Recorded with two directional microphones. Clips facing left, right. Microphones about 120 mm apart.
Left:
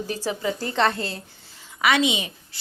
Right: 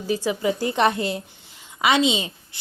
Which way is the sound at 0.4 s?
10° right (ahead or behind).